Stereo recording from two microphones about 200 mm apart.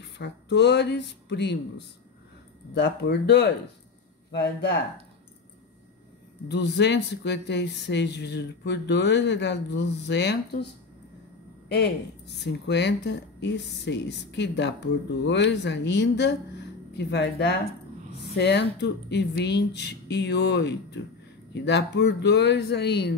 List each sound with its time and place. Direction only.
0.0 s speech: 60° left (ahead or behind)
2.7 s speech: 60° left (ahead or behind)
6.5 s speech: 60° left (ahead or behind)
11.7 s speech: 55° left (ahead or behind)